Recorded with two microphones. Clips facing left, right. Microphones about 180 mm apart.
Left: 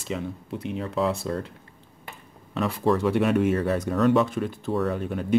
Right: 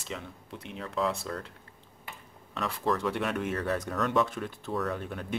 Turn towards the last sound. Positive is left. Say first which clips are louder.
# left 9 dB
turn(degrees=5)  # may be behind; listen again after turning